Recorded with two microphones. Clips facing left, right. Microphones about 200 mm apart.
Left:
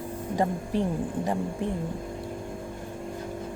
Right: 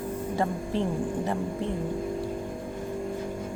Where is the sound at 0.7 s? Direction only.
15° left (ahead or behind).